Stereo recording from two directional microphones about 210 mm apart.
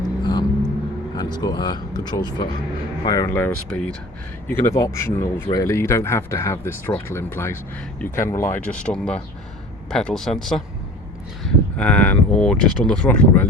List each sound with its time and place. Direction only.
0.3 s vehicle: 20° left (ahead or behind)
1.1 s speech: 20° left (ahead or behind)